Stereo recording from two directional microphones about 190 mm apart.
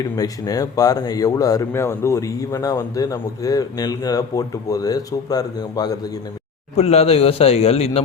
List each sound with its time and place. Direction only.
0.0 s speech: 20° left (ahead or behind)
6.7 s a man's voice: 35° left (ahead or behind)